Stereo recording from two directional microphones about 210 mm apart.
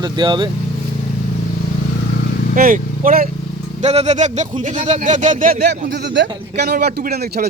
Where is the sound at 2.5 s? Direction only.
40° right (ahead or behind).